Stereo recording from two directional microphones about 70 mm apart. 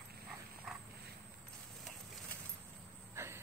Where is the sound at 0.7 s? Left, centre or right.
Centre.